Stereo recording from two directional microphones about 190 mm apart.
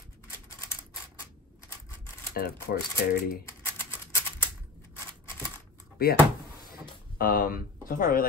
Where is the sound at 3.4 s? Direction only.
10° left (ahead or behind).